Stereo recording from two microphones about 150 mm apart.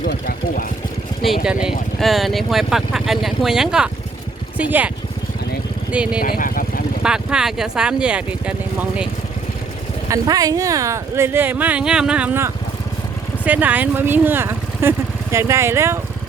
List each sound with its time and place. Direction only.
0.0 s speech: 70° left (ahead or behind)
1.2 s speech: 5° right (ahead or behind)
5.9 s speech: 5° right (ahead or behind)
6.2 s speech: 75° left (ahead or behind)
7.0 s speech: 5° right (ahead or behind)
10.1 s speech: 25° right (ahead or behind)